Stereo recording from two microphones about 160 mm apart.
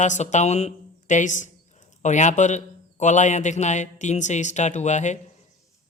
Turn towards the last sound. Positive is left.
turn(degrees=45)  # may be behind; listen again after turning